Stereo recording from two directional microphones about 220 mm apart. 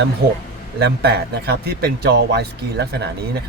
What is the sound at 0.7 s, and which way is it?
Speech, 45° right (ahead or behind).